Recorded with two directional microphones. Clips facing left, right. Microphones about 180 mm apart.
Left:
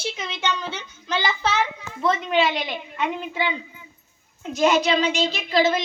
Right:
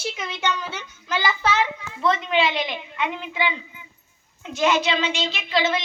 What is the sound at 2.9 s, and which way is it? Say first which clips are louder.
Speech: left 1 dB; 45° left (ahead or behind).